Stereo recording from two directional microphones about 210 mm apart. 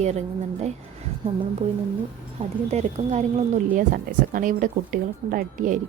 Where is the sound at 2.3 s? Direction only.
30° right (ahead or behind).